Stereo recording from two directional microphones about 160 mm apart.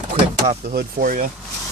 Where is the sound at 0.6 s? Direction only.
65° right (ahead or behind).